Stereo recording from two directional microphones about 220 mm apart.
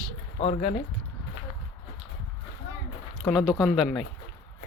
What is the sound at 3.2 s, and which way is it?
Speech, centre (ahead or behind).